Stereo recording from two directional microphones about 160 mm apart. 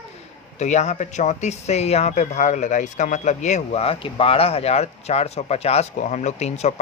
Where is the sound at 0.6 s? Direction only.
45° left (ahead or behind).